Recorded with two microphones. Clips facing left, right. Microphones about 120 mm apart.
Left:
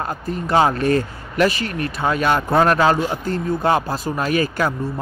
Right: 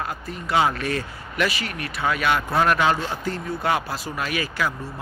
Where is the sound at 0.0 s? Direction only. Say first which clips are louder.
Left 6 dB; 40° left (ahead or behind).